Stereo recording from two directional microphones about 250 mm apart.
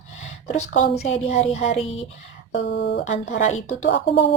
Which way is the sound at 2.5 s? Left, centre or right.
Left.